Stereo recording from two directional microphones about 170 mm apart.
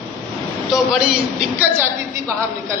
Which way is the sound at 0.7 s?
5° right (ahead or behind).